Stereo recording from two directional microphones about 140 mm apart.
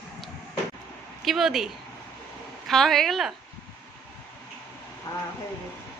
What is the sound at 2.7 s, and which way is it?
Speech, centre (ahead or behind).